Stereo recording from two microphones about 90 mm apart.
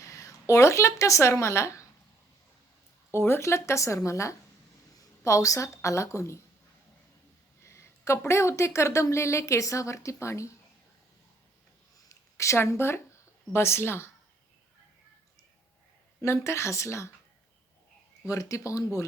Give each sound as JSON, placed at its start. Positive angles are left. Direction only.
{"t": 0.0, "sound": "speech", "side_deg": 35}
{"t": 3.1, "sound": "a woman's voice", "side_deg": 25}
{"t": 7.6, "sound": "speech", "side_deg": 30}
{"t": 11.9, "sound": "a sound", "side_deg": 35}
{"t": 13.5, "sound": "speech", "side_deg": 30}
{"t": 16.2, "sound": "speech", "side_deg": 35}
{"t": 18.3, "sound": "speech", "side_deg": 35}